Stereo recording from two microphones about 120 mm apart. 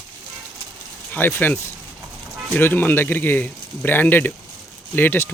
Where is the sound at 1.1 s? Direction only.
15° left (ahead or behind).